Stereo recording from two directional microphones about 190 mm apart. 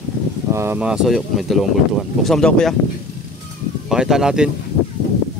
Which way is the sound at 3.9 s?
5° right (ahead or behind).